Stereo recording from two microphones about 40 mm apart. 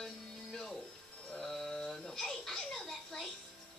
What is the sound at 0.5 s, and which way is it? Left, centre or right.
Speech, centre.